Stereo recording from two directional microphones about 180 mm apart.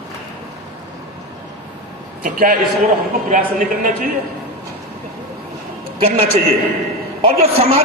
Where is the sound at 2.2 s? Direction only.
45° right (ahead or behind).